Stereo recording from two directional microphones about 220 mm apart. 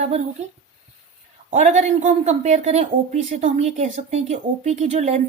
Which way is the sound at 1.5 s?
30° right (ahead or behind).